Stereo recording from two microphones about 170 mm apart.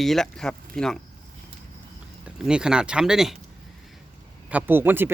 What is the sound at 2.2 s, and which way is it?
Speech, 5° right (ahead or behind).